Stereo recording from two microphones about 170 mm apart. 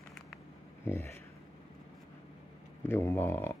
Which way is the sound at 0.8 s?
15° left (ahead or behind).